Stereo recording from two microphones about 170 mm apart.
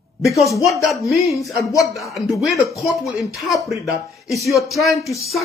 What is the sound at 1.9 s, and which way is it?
Speech, centre (ahead or behind).